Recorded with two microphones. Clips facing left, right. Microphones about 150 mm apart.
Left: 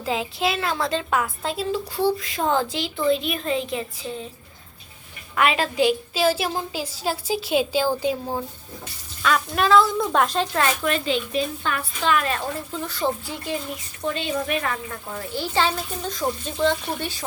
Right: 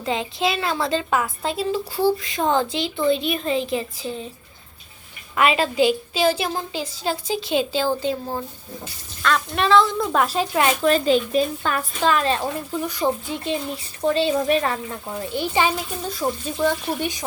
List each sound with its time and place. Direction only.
0.0 s a woman's voice: 5° left (ahead or behind)
5.4 s a woman's voice: centre (ahead or behind)
10.8 s speech: 40° right (ahead or behind)
12.8 s speech: 15° right (ahead or behind)
14.0 s speech: 35° right (ahead or behind)
15.1 s speech: 20° right (ahead or behind); by 16.9 s 5° right (ahead or behind)
17.0 s speech: 15° right (ahead or behind)